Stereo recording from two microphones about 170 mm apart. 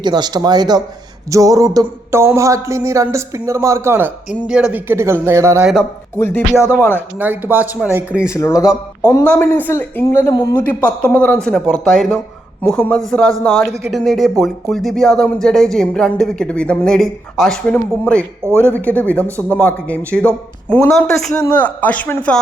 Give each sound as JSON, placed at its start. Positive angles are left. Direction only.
{"t": 0.0, "sound": "speech", "side_deg": -25}
{"t": 6.1, "sound": "speech", "side_deg": 10}
{"t": 7.2, "sound": "speech", "side_deg": -10}
{"t": 8.3, "sound": "speech", "side_deg": 20}
{"t": 10.8, "sound": "speech", "side_deg": 10}
{"t": 18.4, "sound": "speech", "side_deg": -15}
{"t": 18.9, "sound": "speech", "side_deg": 10}